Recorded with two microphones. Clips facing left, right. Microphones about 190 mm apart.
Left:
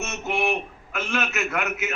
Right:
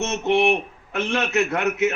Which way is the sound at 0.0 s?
30° right (ahead or behind).